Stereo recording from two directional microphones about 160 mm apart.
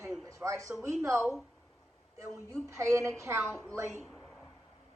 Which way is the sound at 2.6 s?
15° right (ahead or behind).